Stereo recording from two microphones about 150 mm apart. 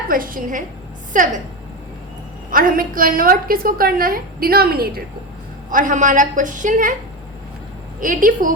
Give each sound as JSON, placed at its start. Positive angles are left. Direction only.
{"t": 0.1, "sound": "a woman's voice", "side_deg": -70}
{"t": 2.5, "sound": "a woman's voice", "side_deg": -70}
{"t": 5.7, "sound": "a woman's voice", "side_deg": -60}
{"t": 8.0, "sound": "a woman's voice", "side_deg": -65}